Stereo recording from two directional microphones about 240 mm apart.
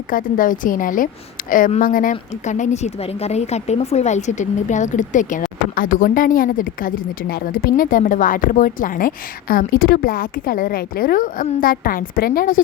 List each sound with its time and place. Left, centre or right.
0.1 s a woman's voice: left